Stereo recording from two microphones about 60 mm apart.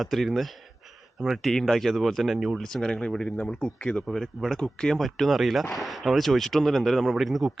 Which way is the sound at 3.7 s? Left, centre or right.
Centre.